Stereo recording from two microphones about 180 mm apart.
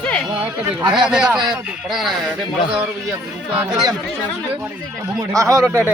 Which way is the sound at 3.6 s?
5° right (ahead or behind).